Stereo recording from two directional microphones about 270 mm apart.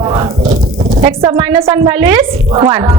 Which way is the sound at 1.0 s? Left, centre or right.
Right.